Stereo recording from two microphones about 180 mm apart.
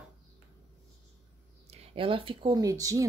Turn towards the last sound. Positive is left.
turn(degrees=-20)  # may be behind; listen again after turning